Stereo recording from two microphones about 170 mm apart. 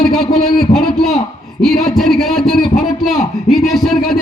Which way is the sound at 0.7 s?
Centre (ahead or behind).